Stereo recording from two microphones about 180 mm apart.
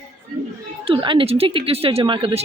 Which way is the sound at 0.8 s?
30° right (ahead or behind).